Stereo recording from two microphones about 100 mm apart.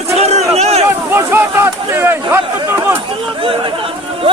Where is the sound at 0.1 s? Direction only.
90° right.